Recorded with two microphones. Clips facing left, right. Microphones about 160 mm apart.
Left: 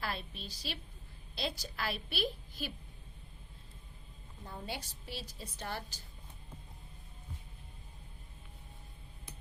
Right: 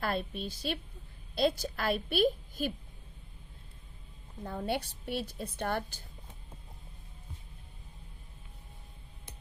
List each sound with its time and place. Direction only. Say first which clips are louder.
0.0 s a woman's voice: right 7 dB; 50° right (ahead or behind)
4.4 s a woman's voice: right 9 dB; 60° right (ahead or behind)